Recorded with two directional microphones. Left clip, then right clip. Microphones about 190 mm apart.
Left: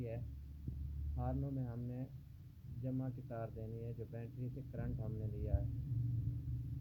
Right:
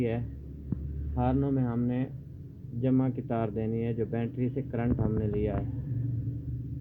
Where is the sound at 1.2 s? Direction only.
50° right (ahead or behind).